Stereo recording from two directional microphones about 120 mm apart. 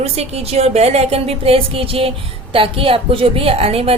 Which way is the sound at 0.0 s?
60° right (ahead or behind).